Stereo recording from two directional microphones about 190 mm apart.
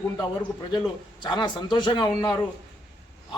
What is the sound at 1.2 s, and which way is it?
A man's voice, 25° left (ahead or behind).